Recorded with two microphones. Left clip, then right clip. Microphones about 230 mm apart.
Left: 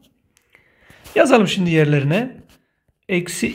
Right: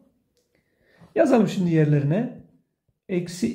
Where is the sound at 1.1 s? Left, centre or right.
Left.